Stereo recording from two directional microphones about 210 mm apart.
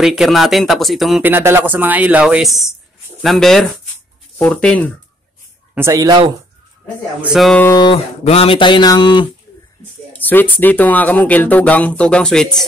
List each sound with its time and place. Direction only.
0.0 s speech: centre (ahead or behind)
5.8 s speech: 15° right (ahead or behind)
7.2 s speech: centre (ahead or behind)
7.7 s speech: 25° left (ahead or behind)
10.1 s speech: 10° left (ahead or behind)